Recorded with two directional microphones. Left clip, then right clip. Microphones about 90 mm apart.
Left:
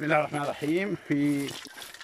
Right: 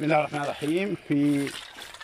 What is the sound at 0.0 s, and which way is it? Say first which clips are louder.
Speech: right 2 dB; 20° right (ahead or behind).